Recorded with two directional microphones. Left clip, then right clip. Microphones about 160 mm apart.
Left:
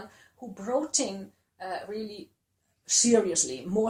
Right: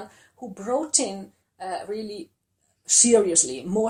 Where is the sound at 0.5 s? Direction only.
50° right (ahead or behind).